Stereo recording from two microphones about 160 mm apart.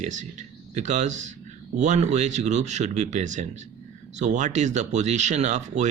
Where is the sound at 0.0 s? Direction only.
50° right (ahead or behind).